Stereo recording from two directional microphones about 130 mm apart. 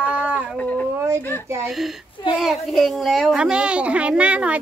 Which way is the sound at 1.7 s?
Centre (ahead or behind).